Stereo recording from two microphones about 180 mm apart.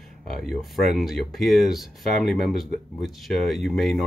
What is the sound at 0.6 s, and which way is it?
Speech, centre (ahead or behind).